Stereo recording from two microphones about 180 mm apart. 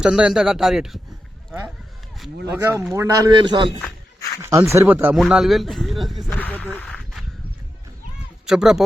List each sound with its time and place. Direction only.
0.0 s speech: 5° right (ahead or behind)
2.6 s speech: 15° right (ahead or behind); by 7.0 s 10° left (ahead or behind)
8.4 s speech: 5° right (ahead or behind)